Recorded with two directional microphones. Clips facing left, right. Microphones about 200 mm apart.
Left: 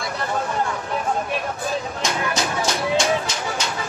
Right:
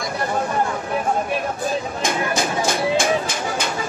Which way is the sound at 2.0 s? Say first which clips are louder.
Right 3 dB; 50° right (ahead or behind).